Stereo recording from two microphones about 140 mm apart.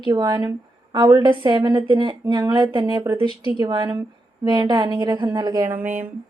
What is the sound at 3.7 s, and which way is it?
A woman's voice, 30° right (ahead or behind).